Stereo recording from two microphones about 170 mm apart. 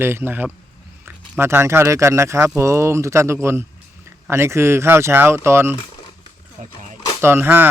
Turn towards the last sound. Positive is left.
turn(degrees=-10)  # may be behind; listen again after turning